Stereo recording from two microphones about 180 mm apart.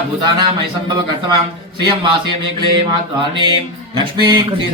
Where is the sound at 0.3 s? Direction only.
25° right (ahead or behind).